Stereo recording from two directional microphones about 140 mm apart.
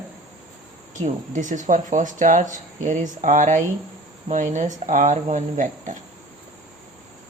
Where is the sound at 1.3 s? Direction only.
65° right (ahead or behind).